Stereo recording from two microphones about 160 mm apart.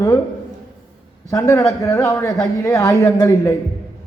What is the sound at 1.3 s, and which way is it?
A man's voice, 20° left (ahead or behind).